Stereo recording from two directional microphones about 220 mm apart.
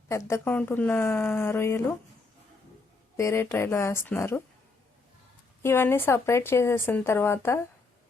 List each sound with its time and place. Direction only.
0.1 s a woman's voice: 15° left (ahead or behind)
3.2 s a woman's voice: 10° left (ahead or behind)
5.6 s a woman's voice: 10° left (ahead or behind)